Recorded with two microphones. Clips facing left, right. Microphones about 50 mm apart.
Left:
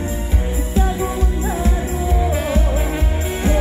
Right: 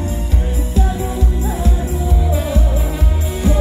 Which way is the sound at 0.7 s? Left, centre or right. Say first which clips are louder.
Left 1 dB; left.